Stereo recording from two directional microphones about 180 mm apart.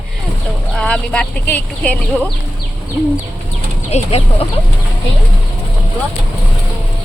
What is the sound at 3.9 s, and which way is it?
Speech, 35° left (ahead or behind).